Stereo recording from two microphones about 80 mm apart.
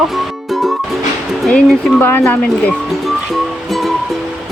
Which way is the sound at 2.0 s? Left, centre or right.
Left.